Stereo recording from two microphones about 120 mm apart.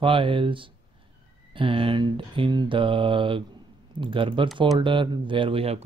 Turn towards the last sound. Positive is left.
turn(degrees=-55)  # may be behind; listen again after turning